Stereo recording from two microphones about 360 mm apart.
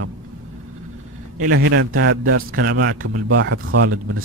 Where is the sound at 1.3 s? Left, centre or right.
Right.